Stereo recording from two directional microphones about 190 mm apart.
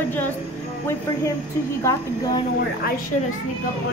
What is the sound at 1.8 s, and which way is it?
Speech, 15° left (ahead or behind).